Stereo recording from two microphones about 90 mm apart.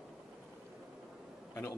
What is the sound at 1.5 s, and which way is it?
Bee, 35° left (ahead or behind).